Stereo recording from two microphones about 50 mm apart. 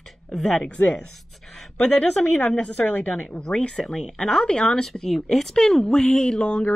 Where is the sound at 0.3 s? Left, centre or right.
Centre.